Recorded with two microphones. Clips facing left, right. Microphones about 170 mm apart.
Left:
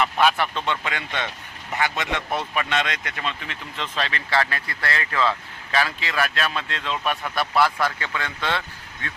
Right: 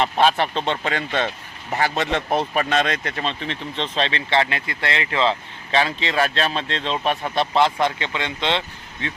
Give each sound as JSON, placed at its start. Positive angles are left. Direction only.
{"t": 0.0, "sound": "speech", "side_deg": -30}